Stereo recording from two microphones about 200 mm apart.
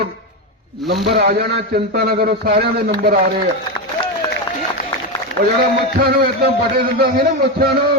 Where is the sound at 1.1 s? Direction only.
50° right (ahead or behind).